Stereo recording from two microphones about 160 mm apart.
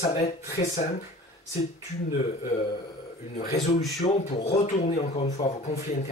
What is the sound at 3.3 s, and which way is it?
Speech, 45° left (ahead or behind).